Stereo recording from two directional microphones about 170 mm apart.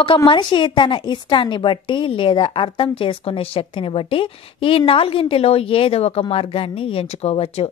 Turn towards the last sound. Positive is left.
turn(degrees=35)  # may be behind; listen again after turning